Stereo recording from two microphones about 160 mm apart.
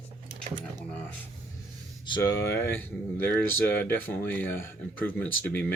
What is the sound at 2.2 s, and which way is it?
Speech, 15° left (ahead or behind).